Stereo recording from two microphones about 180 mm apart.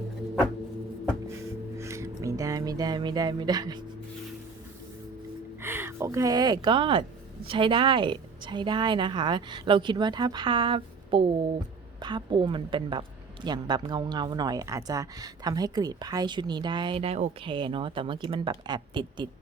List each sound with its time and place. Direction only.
1.8 s music: 15° right (ahead or behind)
5.6 s a woman's voice: 10° right (ahead or behind); by 17.3 s 35° right (ahead or behind)
17.4 s a woman's voice: 25° right (ahead or behind)